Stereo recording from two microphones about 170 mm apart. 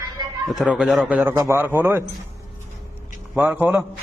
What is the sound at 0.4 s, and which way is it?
A man's voice, centre (ahead or behind).